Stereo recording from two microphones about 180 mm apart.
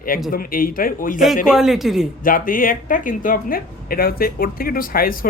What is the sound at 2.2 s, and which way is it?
Speech, 50° left (ahead or behind).